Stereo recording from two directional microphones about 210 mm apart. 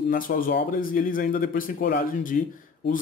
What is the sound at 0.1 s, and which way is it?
Speech, 45° left (ahead or behind).